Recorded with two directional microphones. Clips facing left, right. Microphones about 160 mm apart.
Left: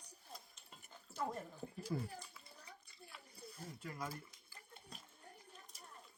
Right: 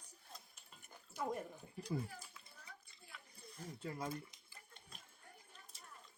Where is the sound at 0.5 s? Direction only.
10° right (ahead or behind).